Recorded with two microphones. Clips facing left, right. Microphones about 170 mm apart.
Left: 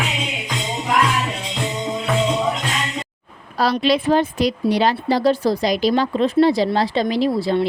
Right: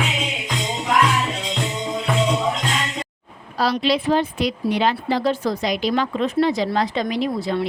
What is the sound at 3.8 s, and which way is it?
Speech, 50° left (ahead or behind).